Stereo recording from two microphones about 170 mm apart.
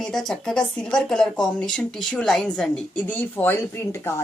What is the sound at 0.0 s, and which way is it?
Speech, 5° left (ahead or behind).